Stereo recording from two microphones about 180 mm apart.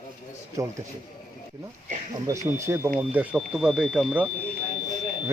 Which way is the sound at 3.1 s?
5° right (ahead or behind).